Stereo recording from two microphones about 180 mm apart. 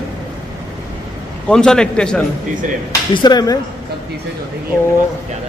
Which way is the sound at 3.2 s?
20° left (ahead or behind).